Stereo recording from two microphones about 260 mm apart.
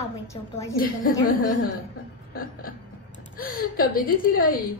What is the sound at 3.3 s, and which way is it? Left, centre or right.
A woman's voice, left.